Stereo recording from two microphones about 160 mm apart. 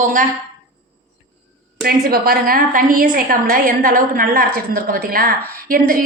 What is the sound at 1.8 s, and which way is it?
A woman's voice, 70° right (ahead or behind).